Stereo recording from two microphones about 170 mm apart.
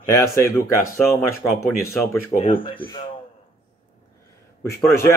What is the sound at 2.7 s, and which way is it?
Speech, 30° left (ahead or behind).